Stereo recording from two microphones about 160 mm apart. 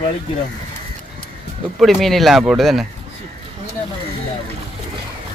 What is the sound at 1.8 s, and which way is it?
Speech, centre (ahead or behind).